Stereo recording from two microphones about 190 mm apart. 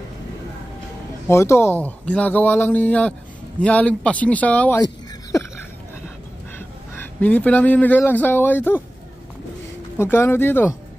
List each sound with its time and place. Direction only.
1.3 s a man's voice: 15° left (ahead or behind)
5.3 s a sound: 15° left (ahead or behind)
7.0 s a man's voice: 10° left (ahead or behind)
9.9 s a man's voice: 10° left (ahead or behind)